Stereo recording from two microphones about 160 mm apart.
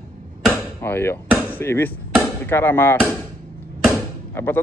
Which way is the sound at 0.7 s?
15° left (ahead or behind).